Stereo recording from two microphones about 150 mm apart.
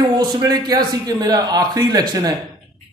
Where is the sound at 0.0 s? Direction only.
30° right (ahead or behind).